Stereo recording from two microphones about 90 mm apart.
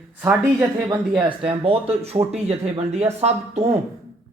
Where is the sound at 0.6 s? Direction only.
35° right (ahead or behind).